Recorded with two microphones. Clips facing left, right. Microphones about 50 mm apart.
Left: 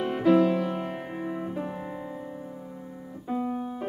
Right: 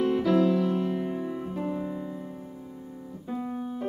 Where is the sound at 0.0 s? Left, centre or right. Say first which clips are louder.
Left 1 dB; left.